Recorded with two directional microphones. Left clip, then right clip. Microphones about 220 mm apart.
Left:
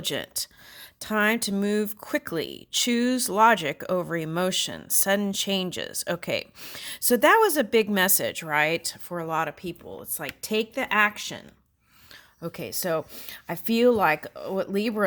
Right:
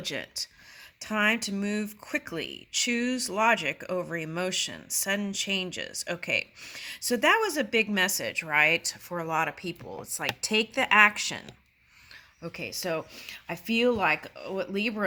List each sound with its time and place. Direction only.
0.0 s speech: 45° left (ahead or behind); by 11.4 s 20° left (ahead or behind)
12.4 s speech: 45° left (ahead or behind)